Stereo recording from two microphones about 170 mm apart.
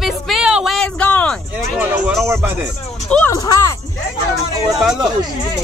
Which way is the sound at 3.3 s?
20° left (ahead or behind).